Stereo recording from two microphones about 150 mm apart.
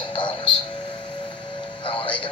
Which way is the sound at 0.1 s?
35° left (ahead or behind).